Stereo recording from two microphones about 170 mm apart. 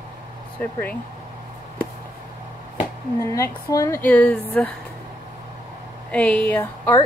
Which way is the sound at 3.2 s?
15° left (ahead or behind).